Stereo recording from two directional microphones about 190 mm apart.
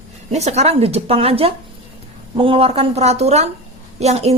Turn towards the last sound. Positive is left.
turn(degrees=-35)  # may be behind; listen again after turning